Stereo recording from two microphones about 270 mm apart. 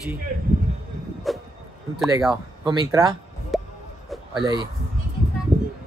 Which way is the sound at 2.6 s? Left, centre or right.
Centre.